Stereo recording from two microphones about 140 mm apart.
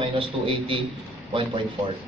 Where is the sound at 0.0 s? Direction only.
40° right (ahead or behind).